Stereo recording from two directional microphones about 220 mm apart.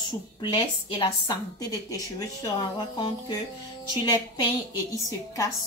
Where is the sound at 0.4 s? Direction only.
20° left (ahead or behind).